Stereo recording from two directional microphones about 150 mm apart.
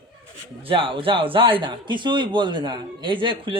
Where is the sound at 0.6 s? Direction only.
35° right (ahead or behind).